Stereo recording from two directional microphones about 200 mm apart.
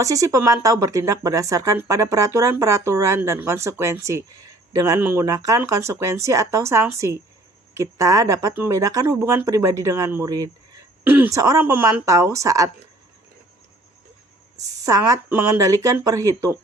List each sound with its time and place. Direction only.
0.0 s speech: 15° right (ahead or behind)
14.6 s speech: 15° right (ahead or behind)